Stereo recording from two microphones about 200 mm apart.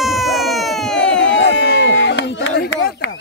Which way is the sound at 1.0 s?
65° left (ahead or behind).